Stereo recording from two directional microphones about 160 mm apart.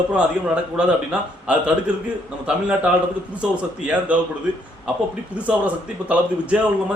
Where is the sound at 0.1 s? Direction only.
5° right (ahead or behind).